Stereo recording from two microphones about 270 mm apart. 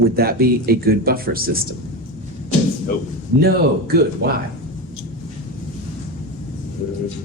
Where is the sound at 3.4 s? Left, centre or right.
Right.